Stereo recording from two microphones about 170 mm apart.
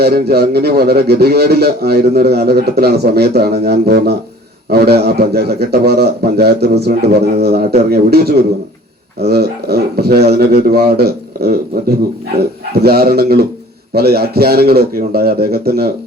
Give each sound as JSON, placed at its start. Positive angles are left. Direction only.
{"t": 0.0, "sound": "a man's voice", "side_deg": -70}